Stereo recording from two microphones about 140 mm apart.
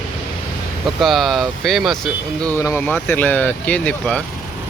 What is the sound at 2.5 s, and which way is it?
Speech, 20° left (ahead or behind).